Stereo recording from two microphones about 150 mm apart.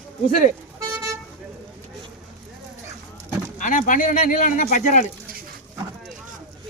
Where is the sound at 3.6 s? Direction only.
60° left (ahead or behind).